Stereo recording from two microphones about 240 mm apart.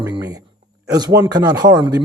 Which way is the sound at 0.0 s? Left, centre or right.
Centre.